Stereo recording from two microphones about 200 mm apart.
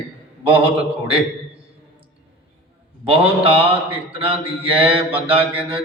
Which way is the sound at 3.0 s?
30° right (ahead or behind).